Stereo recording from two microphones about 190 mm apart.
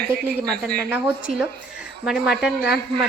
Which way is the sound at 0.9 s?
10° right (ahead or behind).